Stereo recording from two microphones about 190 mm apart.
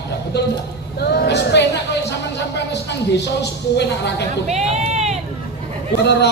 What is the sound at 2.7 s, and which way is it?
A woman's voice, 65° left (ahead or behind).